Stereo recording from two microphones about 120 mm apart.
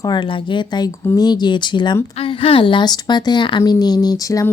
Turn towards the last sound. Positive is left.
turn(degrees=30)  # may be behind; listen again after turning